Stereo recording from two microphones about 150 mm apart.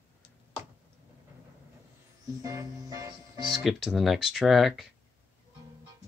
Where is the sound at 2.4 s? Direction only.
20° right (ahead or behind).